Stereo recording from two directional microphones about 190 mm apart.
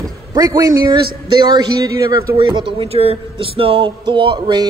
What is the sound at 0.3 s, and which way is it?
A man's voice, 20° right (ahead or behind).